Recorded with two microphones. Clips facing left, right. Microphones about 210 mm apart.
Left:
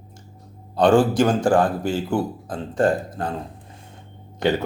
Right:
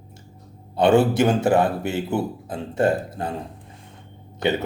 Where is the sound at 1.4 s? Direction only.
25° right (ahead or behind).